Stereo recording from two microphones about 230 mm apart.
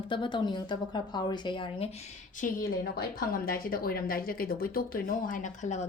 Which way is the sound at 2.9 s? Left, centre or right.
Left.